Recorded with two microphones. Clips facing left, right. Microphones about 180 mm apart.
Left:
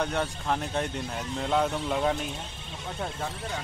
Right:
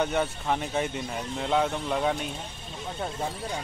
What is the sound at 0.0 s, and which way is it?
Speech, centre (ahead or behind).